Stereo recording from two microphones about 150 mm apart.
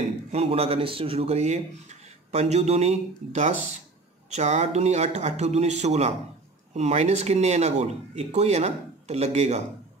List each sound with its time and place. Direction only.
0.3 s speech: 40° right (ahead or behind)